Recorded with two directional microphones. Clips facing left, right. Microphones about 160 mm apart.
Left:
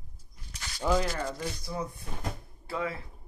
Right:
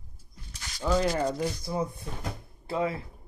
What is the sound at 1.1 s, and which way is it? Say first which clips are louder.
Speech: right 6 dB; 25° right (ahead or behind).